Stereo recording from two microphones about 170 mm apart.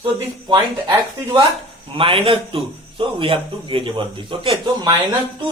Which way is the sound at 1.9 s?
30° right (ahead or behind).